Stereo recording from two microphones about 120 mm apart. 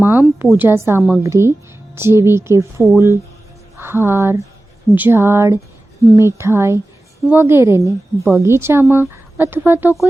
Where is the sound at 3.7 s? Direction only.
20° right (ahead or behind).